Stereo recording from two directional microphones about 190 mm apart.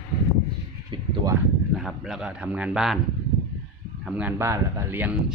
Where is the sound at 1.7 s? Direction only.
Centre (ahead or behind).